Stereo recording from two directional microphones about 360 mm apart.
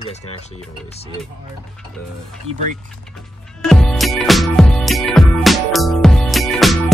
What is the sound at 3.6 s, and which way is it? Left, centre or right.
Music, centre.